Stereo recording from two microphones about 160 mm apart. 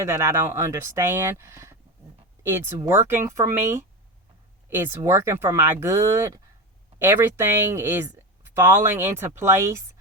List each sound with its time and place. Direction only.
0.0 s speech: 15° right (ahead or behind)